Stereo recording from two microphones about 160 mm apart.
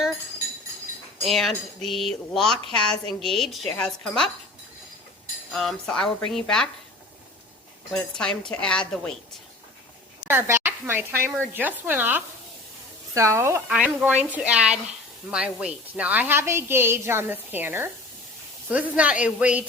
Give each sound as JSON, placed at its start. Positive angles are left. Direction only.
{"t": 1.2, "sound": "speech", "side_deg": 0}
{"t": 5.5, "sound": "speech", "side_deg": 0}
{"t": 7.9, "sound": "speech", "side_deg": 5}
{"t": 10.2, "sound": "a woman's voice", "side_deg": -15}